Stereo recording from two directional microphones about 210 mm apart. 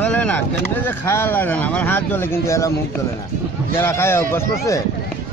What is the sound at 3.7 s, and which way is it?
Speech, 10° left (ahead or behind).